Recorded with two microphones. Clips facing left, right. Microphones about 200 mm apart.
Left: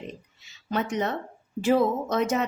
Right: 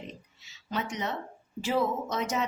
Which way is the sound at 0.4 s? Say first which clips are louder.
Left 5 dB; 55° left (ahead or behind).